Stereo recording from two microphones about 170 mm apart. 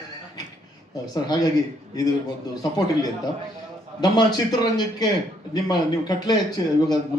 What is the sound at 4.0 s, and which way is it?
A man's voice, 25° left (ahead or behind).